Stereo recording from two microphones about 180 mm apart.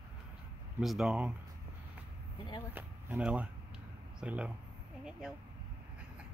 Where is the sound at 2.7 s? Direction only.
10° right (ahead or behind).